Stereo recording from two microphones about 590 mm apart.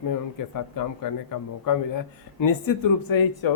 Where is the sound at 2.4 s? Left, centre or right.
Left.